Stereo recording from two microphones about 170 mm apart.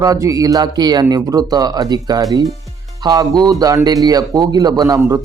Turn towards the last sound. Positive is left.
turn(degrees=-20)  # may be behind; listen again after turning